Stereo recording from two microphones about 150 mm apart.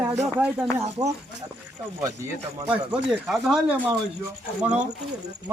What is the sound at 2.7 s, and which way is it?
Speech, 5° right (ahead or behind).